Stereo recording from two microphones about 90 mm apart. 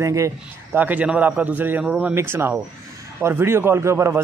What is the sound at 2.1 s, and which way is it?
A man's voice, 25° right (ahead or behind).